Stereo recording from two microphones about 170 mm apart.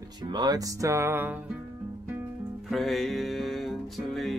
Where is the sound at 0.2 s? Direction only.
25° right (ahead or behind).